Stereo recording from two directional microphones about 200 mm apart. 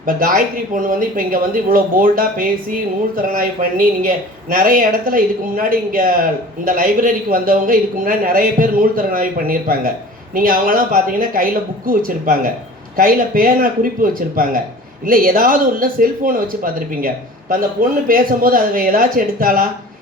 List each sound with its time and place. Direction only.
0.0 s a man's voice: 45° right (ahead or behind)